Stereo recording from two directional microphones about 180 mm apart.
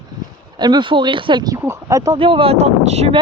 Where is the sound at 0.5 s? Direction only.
25° right (ahead or behind).